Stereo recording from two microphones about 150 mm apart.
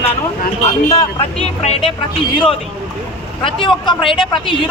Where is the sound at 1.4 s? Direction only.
40° left (ahead or behind).